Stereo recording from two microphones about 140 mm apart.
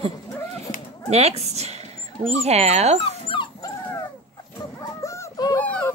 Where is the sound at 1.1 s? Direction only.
50° right (ahead or behind).